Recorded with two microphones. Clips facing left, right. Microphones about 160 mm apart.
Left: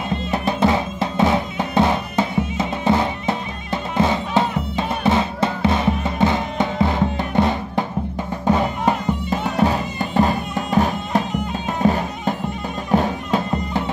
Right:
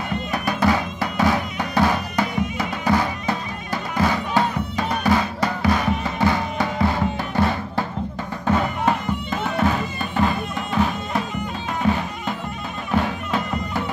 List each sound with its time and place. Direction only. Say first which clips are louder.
0.1 s music: left 3 dB; 25° left (ahead or behind)